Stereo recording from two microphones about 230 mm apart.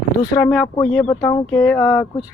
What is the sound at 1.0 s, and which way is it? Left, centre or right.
Speech, centre.